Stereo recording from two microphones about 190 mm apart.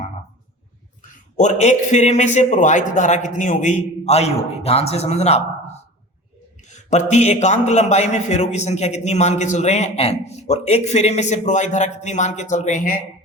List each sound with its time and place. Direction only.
1.4 s speech: 40° left (ahead or behind)
6.7 s speech: 40° left (ahead or behind)